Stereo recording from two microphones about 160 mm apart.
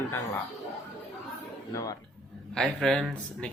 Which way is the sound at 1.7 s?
20° left (ahead or behind).